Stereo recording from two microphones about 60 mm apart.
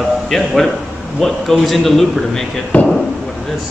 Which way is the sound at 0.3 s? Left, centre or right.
Centre.